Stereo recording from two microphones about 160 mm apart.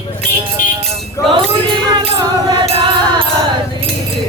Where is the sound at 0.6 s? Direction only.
60° left (ahead or behind).